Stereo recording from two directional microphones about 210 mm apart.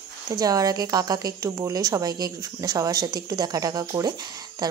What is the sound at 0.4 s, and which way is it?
A woman's voice, 15° right (ahead or behind).